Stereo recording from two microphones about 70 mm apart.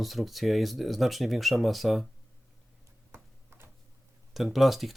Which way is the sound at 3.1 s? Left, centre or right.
Right.